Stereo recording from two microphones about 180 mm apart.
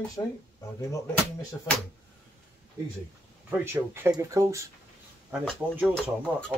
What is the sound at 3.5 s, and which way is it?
Speech, 15° right (ahead or behind).